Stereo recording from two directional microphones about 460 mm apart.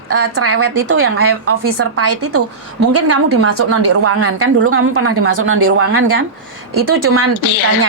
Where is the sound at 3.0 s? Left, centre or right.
Right.